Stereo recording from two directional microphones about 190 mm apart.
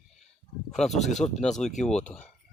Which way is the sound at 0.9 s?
40° left (ahead or behind).